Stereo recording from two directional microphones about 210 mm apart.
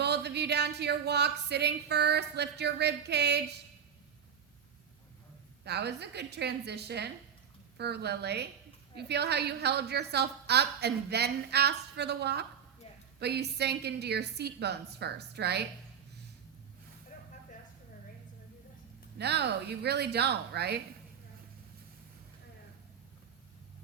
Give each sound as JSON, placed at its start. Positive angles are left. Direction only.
{"t": 0.0, "sound": "a woman's voice", "side_deg": -50}
{"t": 5.6, "sound": "a woman's voice", "side_deg": -50}
{"t": 19.2, "sound": "a woman's voice", "side_deg": -50}